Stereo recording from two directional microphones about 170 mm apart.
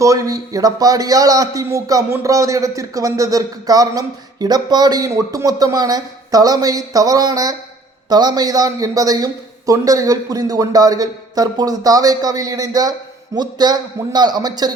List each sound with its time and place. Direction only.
0.0 s a man's voice: 20° right (ahead or behind)